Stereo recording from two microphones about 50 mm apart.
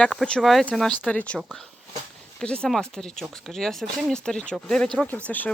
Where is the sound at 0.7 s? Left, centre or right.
Centre.